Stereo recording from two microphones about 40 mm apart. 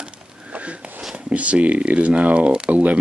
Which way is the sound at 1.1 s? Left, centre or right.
Right.